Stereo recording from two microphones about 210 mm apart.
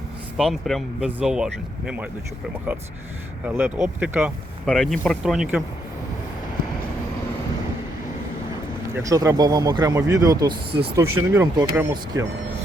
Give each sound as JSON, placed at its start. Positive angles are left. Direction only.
{"t": 0.3, "sound": "speech", "side_deg": 0}
{"t": 8.9, "sound": "speech", "side_deg": -15}